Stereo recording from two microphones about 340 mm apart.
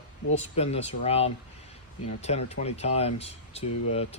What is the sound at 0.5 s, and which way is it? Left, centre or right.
Speech, centre.